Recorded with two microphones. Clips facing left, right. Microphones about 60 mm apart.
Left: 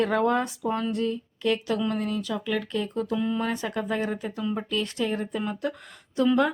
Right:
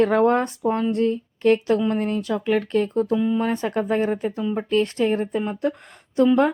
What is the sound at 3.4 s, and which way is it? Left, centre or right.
Speech, right.